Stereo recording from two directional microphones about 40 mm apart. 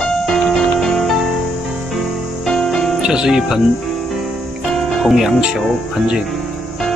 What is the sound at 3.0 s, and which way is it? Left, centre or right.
Speech, centre.